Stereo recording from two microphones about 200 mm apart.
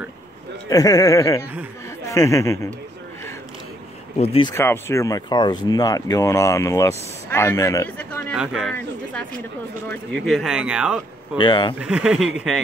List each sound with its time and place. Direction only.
0.7 s speech: 20° left (ahead or behind)
4.2 s speech: 25° left (ahead or behind)
4.6 s speech: 10° left (ahead or behind)
8.4 s speech: centre (ahead or behind)
9.8 s speech: centre (ahead or behind)
11.3 s speech: 20° left (ahead or behind)
11.8 s speech: 5° right (ahead or behind)